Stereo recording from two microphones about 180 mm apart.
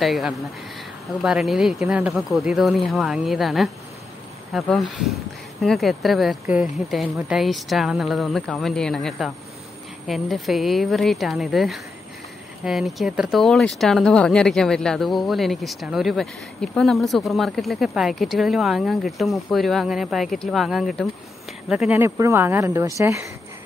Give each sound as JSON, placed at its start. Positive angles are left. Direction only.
{"t": 0.0, "sound": "speech", "side_deg": 0}